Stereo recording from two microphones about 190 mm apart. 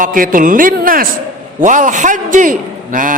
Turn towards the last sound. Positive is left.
turn(degrees=-45)  # may be behind; listen again after turning